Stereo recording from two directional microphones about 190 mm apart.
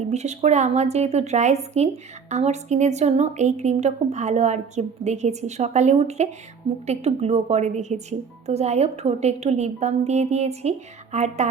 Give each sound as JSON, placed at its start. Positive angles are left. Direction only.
{"t": 0.0, "sound": "a woman's voice", "side_deg": -35}